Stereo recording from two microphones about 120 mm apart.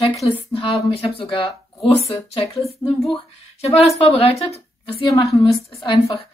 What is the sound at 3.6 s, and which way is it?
Speech, 60° left (ahead or behind).